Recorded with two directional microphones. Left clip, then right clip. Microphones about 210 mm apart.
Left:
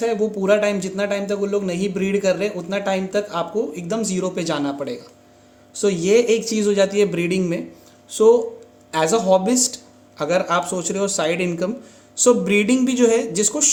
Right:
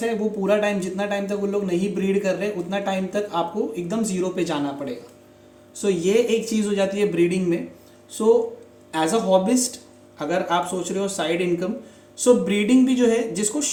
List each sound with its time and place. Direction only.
0.0 s a man's voice: 40° left (ahead or behind)
8.9 s speech: 45° left (ahead or behind)